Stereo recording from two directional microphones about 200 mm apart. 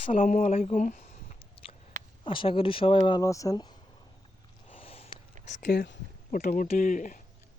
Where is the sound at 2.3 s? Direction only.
25° left (ahead or behind).